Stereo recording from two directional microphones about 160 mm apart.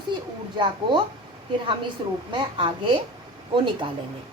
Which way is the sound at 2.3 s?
30° right (ahead or behind).